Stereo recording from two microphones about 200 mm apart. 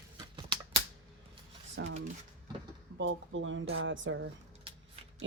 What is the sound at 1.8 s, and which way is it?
Speech, 70° right (ahead or behind).